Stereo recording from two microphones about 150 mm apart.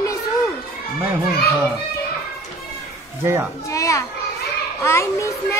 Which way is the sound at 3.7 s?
20° left (ahead or behind).